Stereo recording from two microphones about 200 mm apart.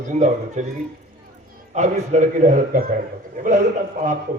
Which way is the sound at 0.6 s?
35° right (ahead or behind).